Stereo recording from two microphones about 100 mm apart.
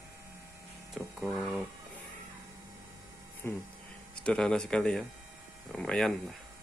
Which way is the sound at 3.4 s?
20° left (ahead or behind).